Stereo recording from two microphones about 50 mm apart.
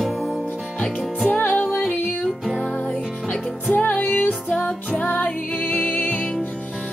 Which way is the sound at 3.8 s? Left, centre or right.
Left.